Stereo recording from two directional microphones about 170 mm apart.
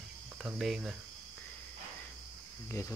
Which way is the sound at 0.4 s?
5° right (ahead or behind).